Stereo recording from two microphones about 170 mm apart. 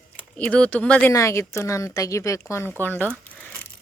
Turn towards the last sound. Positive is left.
turn(degrees=10)  # may be behind; listen again after turning